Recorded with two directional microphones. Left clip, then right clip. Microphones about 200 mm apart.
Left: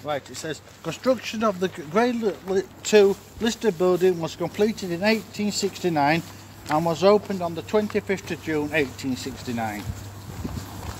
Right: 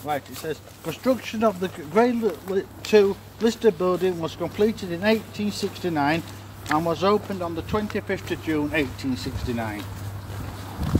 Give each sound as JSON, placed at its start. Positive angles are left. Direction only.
{"t": 0.0, "sound": "speech", "side_deg": 45}